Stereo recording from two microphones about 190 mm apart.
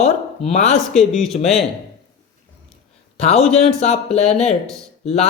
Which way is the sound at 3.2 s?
35° left (ahead or behind).